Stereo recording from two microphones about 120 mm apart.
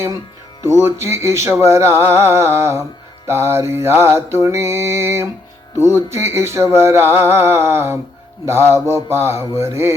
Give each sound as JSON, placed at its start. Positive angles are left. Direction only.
{"t": 0.6, "sound": "music", "side_deg": -20}